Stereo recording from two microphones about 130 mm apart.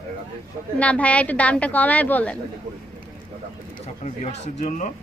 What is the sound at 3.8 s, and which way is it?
Speech, 60° left (ahead or behind).